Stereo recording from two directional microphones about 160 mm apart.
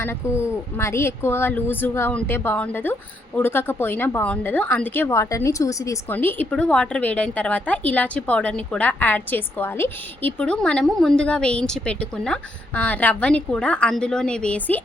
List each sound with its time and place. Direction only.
0.0 s a woman's voice: 15° left (ahead or behind)